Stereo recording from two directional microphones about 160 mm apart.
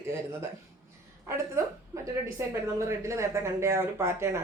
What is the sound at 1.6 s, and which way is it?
A woman's voice, 20° right (ahead or behind).